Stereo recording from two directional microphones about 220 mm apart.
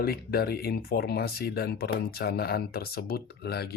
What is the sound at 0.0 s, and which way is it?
Speech, 45° left (ahead or behind).